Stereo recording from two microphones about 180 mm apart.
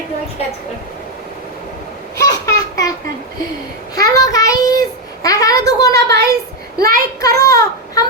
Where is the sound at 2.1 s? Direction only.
20° left (ahead or behind).